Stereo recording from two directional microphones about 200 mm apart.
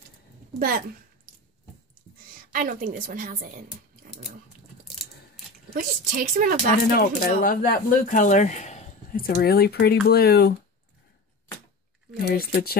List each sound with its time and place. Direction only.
0.6 s a woman's voice: 45° right (ahead or behind)
2.5 s speech: 40° right (ahead or behind)
4.8 s a sound: centre (ahead or behind)
5.8 s a woman's voice: 45° right (ahead or behind)
6.9 s speech: 50° left (ahead or behind)
12.3 s speech: 50° left (ahead or behind)